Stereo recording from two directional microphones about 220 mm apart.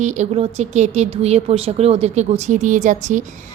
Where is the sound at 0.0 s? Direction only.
30° right (ahead or behind).